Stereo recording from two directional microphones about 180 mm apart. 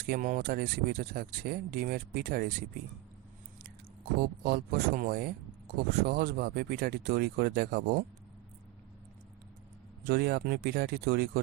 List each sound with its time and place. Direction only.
0.0 s speech: 55° right (ahead or behind)
4.2 s speech: 60° right (ahead or behind)
10.0 s speech: 65° right (ahead or behind)